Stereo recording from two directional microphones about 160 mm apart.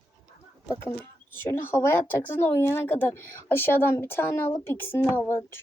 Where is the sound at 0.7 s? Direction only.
15° left (ahead or behind).